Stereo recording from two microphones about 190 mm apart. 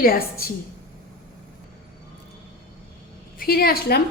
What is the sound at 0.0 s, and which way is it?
Speech, 50° left (ahead or behind).